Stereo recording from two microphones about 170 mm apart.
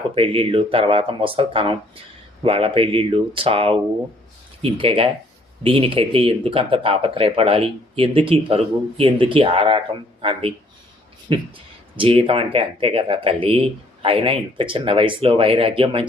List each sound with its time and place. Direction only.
0.1 s speech: 35° right (ahead or behind)